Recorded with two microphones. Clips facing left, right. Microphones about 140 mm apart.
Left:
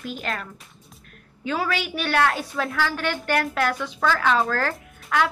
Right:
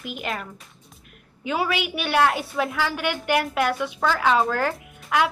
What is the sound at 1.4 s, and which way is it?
Speech, 10° right (ahead or behind).